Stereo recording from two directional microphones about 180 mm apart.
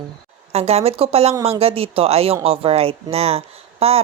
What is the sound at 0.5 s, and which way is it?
Speech, 35° right (ahead or behind).